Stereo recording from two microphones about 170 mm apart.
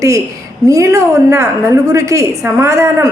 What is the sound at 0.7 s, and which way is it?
A woman's voice, 15° right (ahead or behind).